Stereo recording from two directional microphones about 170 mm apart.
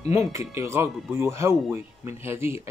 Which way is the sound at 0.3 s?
15° right (ahead or behind).